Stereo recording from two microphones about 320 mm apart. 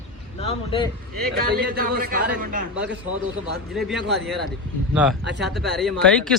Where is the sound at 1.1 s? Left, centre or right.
Right.